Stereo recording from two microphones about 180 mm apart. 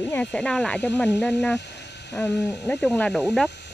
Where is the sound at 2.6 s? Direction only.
15° left (ahead or behind).